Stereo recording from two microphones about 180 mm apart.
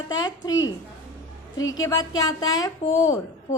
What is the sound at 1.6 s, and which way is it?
Speech, 90° left.